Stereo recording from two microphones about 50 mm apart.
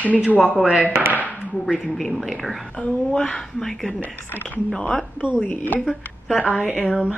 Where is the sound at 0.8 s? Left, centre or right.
Right.